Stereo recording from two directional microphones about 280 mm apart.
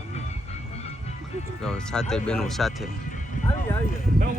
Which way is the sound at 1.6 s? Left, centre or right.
Centre.